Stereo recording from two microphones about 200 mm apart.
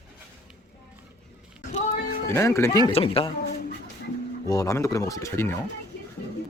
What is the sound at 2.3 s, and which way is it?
Speech, 15° left (ahead or behind).